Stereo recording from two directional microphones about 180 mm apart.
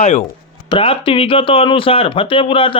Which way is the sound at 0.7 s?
30° left (ahead or behind).